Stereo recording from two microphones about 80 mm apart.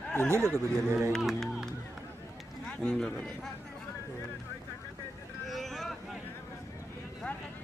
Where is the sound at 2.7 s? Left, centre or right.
Centre.